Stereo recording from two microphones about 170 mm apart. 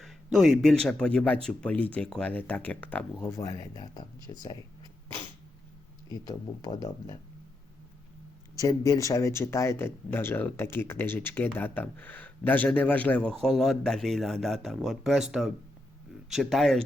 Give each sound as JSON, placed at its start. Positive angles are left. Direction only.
{"t": 0.0, "sound": "speech", "side_deg": 0}
{"t": 6.1, "sound": "speech", "side_deg": 25}
{"t": 8.5, "sound": "speech", "side_deg": 20}